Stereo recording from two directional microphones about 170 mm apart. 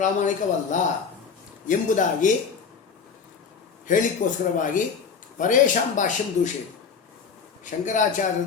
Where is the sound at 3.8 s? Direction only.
50° left (ahead or behind).